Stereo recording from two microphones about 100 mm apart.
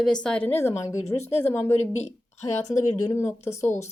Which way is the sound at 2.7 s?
30° left (ahead or behind).